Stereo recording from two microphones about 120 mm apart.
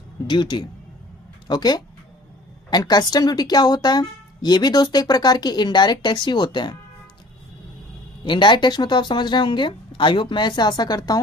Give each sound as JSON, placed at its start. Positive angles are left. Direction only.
{"t": 0.3, "sound": "a woman's voice", "side_deg": 40}
{"t": 8.2, "sound": "a woman's voice", "side_deg": 40}